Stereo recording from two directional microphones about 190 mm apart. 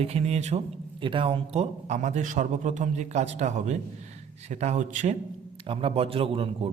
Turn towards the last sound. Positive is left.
turn(degrees=-30)  # may be behind; listen again after turning